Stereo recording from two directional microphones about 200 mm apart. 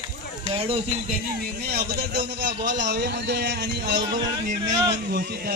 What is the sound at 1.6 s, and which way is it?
A man's voice, 50° right (ahead or behind).